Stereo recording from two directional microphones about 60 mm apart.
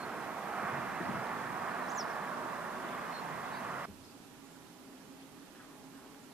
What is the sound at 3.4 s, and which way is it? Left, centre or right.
Vehicle, centre.